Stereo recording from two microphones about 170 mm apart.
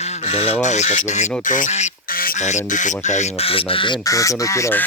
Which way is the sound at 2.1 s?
60° left (ahead or behind).